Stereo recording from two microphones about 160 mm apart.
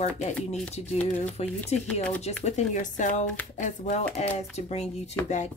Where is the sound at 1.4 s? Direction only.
40° left (ahead or behind).